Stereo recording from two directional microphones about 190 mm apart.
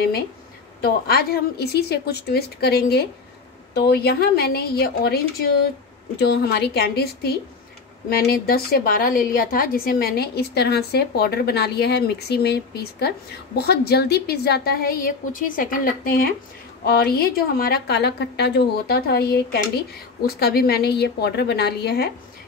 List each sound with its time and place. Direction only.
0.7 s a woman's voice: 55° left (ahead or behind)
6.2 s a woman's voice: 60° left (ahead or behind)
13.6 s a woman's voice: 55° left (ahead or behind)